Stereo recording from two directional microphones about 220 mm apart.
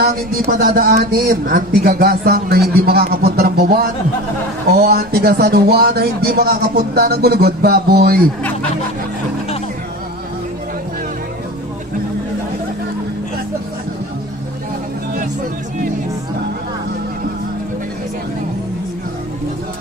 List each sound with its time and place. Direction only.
0.0 s speech: 40° right (ahead or behind)